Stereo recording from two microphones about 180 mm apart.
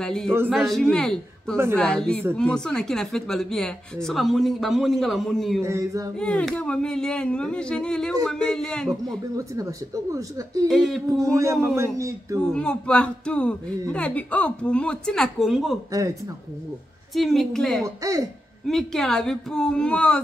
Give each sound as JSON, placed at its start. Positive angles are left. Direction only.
{"t": 0.0, "sound": "speech", "side_deg": 5}
{"t": 5.6, "sound": "speech", "side_deg": -15}
{"t": 6.1, "sound": "speech", "side_deg": 5}
{"t": 9.4, "sound": "speech", "side_deg": -15}
{"t": 10.7, "sound": "speech", "side_deg": 0}
{"t": 11.1, "sound": "speech", "side_deg": -15}
{"t": 12.5, "sound": "speech", "side_deg": 5}
{"t": 17.1, "sound": "speech", "side_deg": 0}
{"t": 17.8, "sound": "speech", "side_deg": -20}
{"t": 18.7, "sound": "speech", "side_deg": 0}